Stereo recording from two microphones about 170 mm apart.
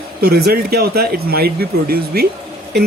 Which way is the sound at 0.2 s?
65° right (ahead or behind).